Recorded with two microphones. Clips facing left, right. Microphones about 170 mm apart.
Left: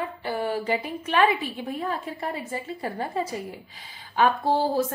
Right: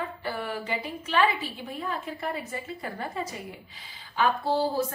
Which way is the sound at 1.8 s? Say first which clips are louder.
Even; 35° left (ahead or behind).